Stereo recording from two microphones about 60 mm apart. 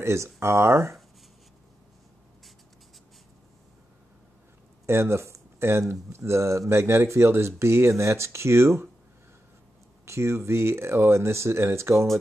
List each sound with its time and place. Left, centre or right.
0.0 s speech: right
4.8 s speech: right
10.0 s speech: right